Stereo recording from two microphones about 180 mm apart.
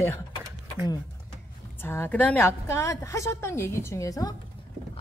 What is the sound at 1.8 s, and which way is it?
A woman's voice, 10° left (ahead or behind).